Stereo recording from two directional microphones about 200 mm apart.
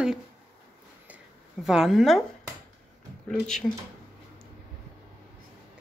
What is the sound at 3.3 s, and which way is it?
Speech, centre (ahead or behind).